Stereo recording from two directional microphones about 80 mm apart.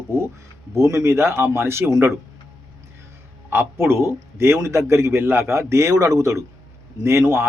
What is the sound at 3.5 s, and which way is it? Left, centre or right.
A man's voice, right.